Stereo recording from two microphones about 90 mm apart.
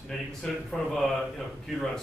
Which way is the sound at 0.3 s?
5° left (ahead or behind).